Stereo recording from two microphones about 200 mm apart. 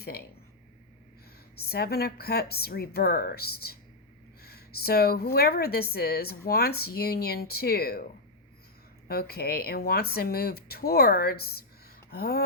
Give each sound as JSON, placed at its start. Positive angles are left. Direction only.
{"t": 0.0, "sound": "speech", "side_deg": 50}
{"t": 1.6, "sound": "a woman's voice", "side_deg": 50}
{"t": 9.0, "sound": "a woman's voice", "side_deg": 50}